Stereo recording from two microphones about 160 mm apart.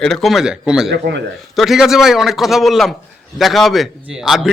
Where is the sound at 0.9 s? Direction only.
90° right.